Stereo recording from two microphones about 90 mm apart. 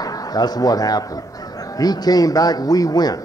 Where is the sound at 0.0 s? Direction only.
45° left (ahead or behind).